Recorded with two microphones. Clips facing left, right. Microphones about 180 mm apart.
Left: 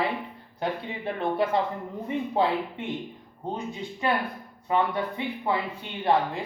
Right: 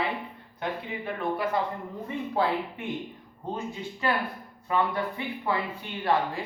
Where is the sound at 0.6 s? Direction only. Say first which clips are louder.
Left 3 dB; 25° left (ahead or behind).